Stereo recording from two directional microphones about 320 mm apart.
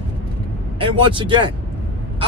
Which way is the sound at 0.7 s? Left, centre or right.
Centre.